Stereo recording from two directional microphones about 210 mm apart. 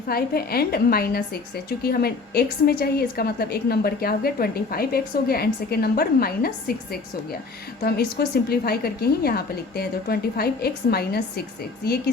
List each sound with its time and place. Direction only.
0.1 s a woman's voice: 45° left (ahead or behind)